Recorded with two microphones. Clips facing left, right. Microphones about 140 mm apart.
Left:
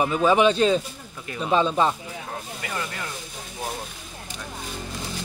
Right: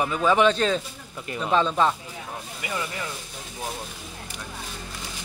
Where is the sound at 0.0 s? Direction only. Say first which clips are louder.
Left 2 dB; 20° left (ahead or behind).